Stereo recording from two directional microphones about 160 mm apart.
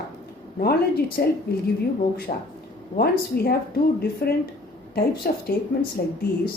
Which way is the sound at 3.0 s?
75° left (ahead or behind).